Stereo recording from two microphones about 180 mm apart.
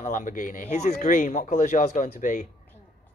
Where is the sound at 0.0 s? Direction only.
45° left (ahead or behind).